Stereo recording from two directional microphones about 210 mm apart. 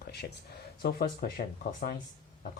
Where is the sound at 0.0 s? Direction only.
50° left (ahead or behind).